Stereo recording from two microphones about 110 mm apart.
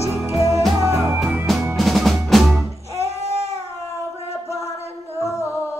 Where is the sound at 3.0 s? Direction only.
70° right (ahead or behind).